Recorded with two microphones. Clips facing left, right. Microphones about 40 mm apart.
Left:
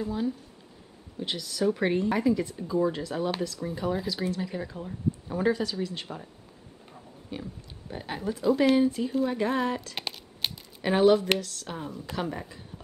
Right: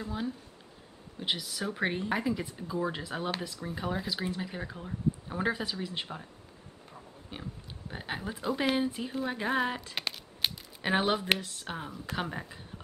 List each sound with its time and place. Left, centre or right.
0.0 s speech: centre
7.3 s speech: centre
9.9 s shuffling cards: centre
10.8 s speech: centre